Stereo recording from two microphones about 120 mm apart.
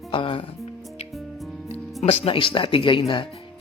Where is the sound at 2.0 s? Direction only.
50° left (ahead or behind).